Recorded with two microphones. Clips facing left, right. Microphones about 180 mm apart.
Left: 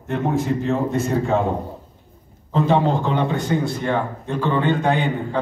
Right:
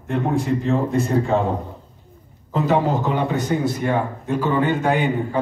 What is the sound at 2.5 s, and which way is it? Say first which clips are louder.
A man's voice: left 1 dB; 5° right (ahead or behind).